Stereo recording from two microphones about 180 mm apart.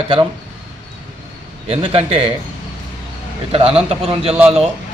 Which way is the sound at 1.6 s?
30° right (ahead or behind).